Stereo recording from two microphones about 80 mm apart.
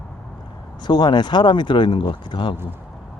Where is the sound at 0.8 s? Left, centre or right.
Left.